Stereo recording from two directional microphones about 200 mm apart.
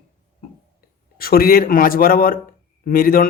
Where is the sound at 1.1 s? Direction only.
50° left (ahead or behind).